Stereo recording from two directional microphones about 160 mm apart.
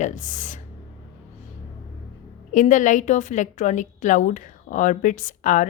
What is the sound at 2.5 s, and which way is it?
A woman's voice, 50° left (ahead or behind).